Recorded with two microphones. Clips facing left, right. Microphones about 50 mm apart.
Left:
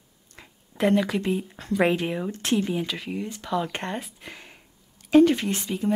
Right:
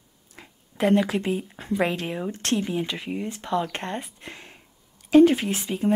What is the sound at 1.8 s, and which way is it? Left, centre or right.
Speech, centre.